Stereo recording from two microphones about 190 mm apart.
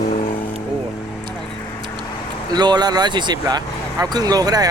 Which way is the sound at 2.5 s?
20° right (ahead or behind).